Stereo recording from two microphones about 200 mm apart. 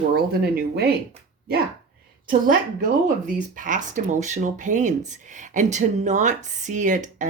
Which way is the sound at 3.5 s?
40° right (ahead or behind).